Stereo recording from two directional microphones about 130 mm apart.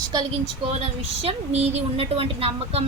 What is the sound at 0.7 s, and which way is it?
A woman's voice, 55° right (ahead or behind).